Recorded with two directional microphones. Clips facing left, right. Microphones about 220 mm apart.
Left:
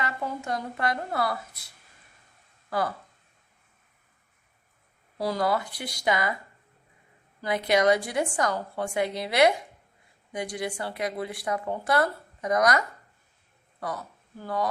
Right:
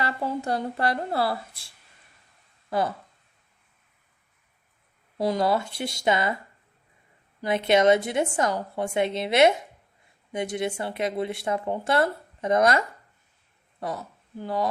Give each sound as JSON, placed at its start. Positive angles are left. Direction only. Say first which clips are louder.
{"t": 0.0, "sound": "a woman's voice", "louder": "right 4 dB", "side_deg": -35}
{"t": 5.1, "sound": "speech", "louder": "right 3 dB", "side_deg": -20}
{"t": 7.4, "sound": "speech", "louder": "right 3 dB", "side_deg": -25}